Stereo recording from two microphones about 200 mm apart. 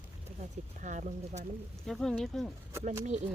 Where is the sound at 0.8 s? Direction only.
40° right (ahead or behind).